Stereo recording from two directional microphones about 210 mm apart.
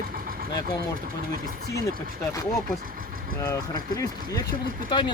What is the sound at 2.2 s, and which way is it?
Speech, 15° left (ahead or behind).